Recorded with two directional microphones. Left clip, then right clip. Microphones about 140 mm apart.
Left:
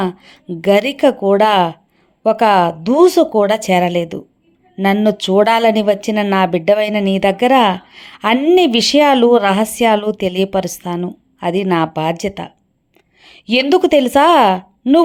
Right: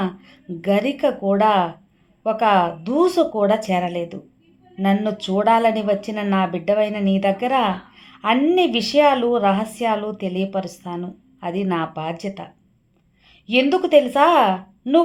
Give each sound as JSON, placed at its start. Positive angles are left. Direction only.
{"t": 0.0, "sound": "a woman's voice", "side_deg": 40}